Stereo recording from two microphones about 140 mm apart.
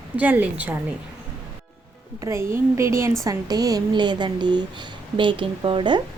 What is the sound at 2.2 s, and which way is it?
A woman's voice, 20° right (ahead or behind).